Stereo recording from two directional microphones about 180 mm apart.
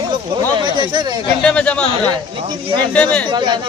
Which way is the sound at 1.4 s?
5° left (ahead or behind).